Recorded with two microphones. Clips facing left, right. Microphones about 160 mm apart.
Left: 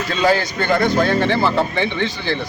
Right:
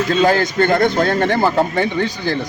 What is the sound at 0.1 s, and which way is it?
A man's voice, 50° right (ahead or behind).